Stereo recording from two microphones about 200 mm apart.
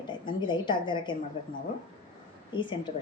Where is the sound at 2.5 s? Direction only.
25° left (ahead or behind).